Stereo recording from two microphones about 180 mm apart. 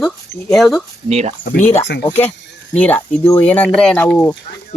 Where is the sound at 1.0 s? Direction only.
35° right (ahead or behind).